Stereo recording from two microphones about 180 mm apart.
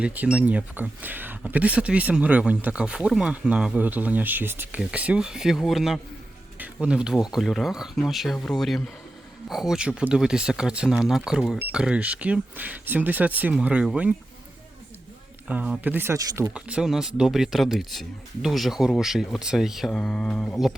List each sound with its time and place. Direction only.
0.0 s speech: 5° right (ahead or behind)
15.4 s speech: 10° right (ahead or behind)